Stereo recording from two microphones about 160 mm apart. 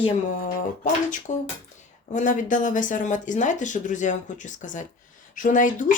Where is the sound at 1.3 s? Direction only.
50° left (ahead or behind).